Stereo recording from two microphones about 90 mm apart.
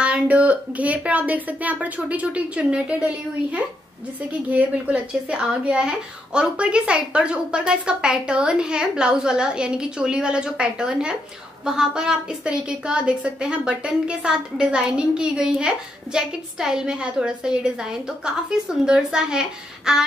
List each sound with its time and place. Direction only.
0.0 s a woman's voice: 15° right (ahead or behind)
4.3 s a woman's voice: 15° right (ahead or behind)